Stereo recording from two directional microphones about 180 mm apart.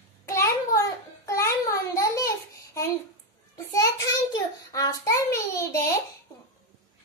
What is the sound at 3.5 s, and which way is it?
Child singing, 20° left (ahead or behind).